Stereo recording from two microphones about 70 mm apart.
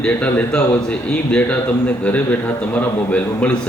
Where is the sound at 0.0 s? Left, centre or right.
Centre.